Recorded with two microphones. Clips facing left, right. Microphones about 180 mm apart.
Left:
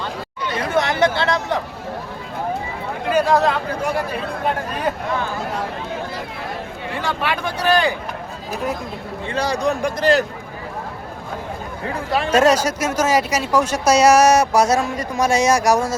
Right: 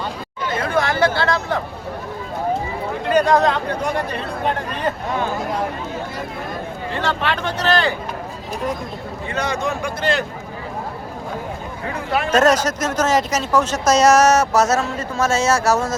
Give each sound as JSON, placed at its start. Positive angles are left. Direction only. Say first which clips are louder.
{"t": 0.6, "sound": "a sound", "louder": "left 1 dB", "side_deg": 20}
{"t": 3.1, "sound": "speech", "louder": "right 1 dB", "side_deg": 5}
{"t": 6.9, "sound": "speech", "louder": "right 1 dB", "side_deg": 10}
{"t": 9.3, "sound": "a man's voice", "louder": "left 3 dB", "side_deg": 35}
{"t": 12.3, "sound": "speech", "louder": "left 1 dB", "side_deg": 10}